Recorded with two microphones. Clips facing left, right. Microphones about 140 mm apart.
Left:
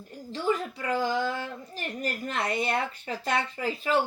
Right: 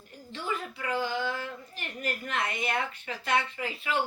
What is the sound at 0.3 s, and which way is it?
Speech, 35° left (ahead or behind).